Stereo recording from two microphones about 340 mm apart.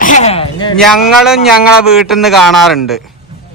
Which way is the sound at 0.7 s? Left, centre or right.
Centre.